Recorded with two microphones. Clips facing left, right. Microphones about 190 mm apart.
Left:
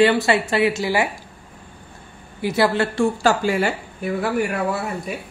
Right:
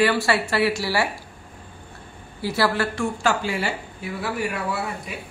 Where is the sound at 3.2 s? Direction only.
40° left (ahead or behind).